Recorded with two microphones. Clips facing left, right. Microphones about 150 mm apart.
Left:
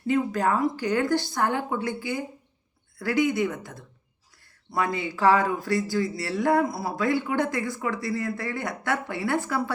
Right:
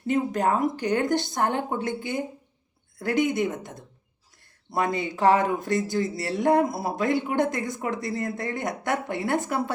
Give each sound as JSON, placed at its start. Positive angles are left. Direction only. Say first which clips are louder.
{"t": 0.1, "sound": "speech", "louder": "even", "side_deg": -20}